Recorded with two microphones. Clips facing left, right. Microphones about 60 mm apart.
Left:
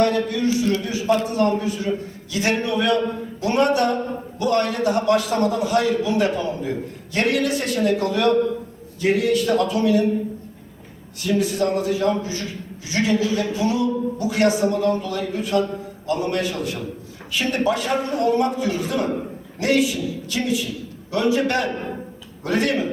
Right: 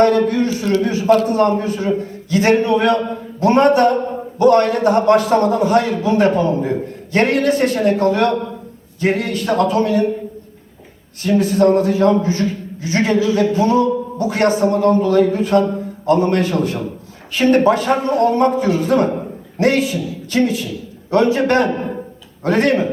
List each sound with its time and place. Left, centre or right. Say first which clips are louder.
0.0 s speech: right 6 dB; right
0.8 s a sound: right 7 dB; right
1.3 s a man's voice: right 5 dB; right
11.2 s a man's voice: right 7 dB; right